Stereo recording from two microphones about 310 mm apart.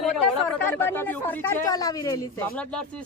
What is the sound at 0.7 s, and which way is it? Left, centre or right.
Speech, centre.